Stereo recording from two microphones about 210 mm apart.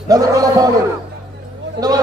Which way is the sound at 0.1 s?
15° right (ahead or behind).